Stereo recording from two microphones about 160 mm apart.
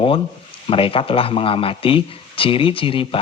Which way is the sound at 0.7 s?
35° left (ahead or behind).